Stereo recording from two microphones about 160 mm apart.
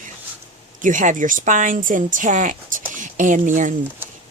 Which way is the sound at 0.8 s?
55° right (ahead or behind).